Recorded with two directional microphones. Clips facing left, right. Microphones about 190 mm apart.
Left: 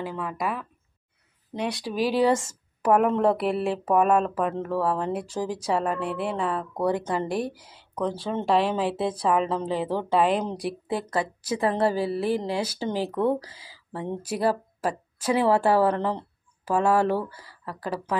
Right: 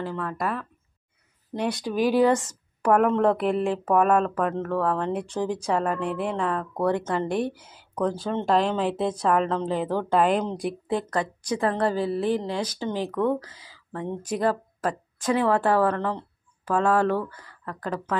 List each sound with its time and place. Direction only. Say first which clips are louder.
0.0 s a woman's voice: right 1 dB; 10° left (ahead or behind)
2.0 s speech: right 2 dB; 30° left (ahead or behind)
3.0 s a woman's voice: right 1 dB; 5° left (ahead or behind)
7.3 s a woman's voice: right 2 dB; 40° left (ahead or behind)
7.9 s a woman's voice: right 2 dB; centre (ahead or behind)
13.1 s a woman's voice: even; 35° left (ahead or behind)
13.5 s a woman's voice: even; 10° left (ahead or behind)